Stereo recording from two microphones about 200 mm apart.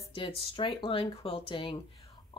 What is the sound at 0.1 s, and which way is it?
Speech, 25° left (ahead or behind).